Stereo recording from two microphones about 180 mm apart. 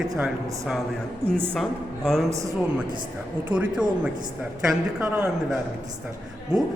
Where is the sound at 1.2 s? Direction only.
30° right (ahead or behind).